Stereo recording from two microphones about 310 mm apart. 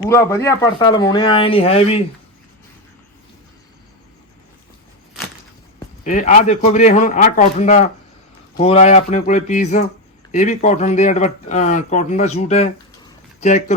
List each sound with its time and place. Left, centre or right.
0.0 s speech: centre
6.1 s speech: left